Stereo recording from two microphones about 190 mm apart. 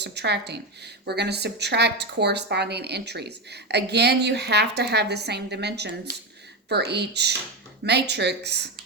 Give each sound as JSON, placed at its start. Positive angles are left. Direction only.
{"t": 0.0, "sound": "a woman's voice", "side_deg": -60}